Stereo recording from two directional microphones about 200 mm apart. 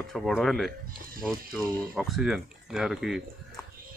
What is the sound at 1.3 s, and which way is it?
Speech, 15° right (ahead or behind).